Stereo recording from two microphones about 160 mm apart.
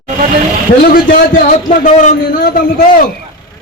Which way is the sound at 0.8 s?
60° left (ahead or behind).